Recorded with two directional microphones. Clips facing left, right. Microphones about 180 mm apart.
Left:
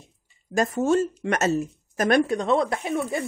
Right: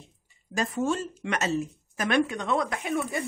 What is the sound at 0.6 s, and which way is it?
A woman's voice, 45° left (ahead or behind).